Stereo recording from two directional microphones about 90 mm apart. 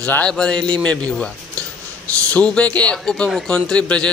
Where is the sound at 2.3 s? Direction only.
15° left (ahead or behind).